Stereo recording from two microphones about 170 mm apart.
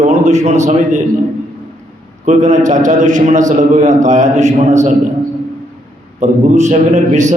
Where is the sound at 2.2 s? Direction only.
45° right (ahead or behind).